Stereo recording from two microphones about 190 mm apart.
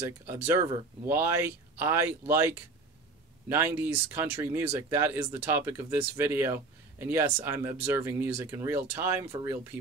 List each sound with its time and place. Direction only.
0.3 s speech: 15° right (ahead or behind)